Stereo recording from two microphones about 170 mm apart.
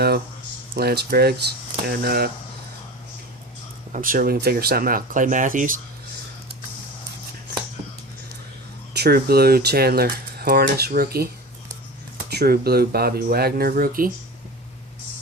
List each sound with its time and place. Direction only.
0.8 s speech: 65° right (ahead or behind)
3.9 s speech: 55° right (ahead or behind)
8.9 s speech: 70° right (ahead or behind)
12.3 s speech: 70° right (ahead or behind)